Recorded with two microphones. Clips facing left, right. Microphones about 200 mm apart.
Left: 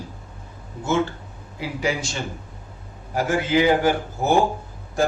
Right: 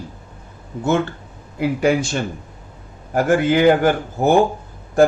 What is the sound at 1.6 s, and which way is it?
Speech, 55° right (ahead or behind).